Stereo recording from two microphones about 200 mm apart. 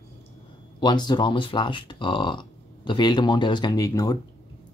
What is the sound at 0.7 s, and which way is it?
Speech, 20° left (ahead or behind).